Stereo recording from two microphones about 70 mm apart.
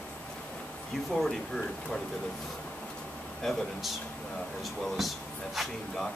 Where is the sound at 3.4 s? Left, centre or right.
Centre.